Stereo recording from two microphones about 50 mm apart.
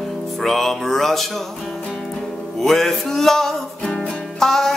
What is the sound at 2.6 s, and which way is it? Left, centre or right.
Music, centre.